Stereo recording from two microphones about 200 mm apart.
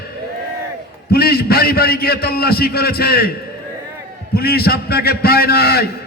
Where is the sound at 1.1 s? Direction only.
50° left (ahead or behind).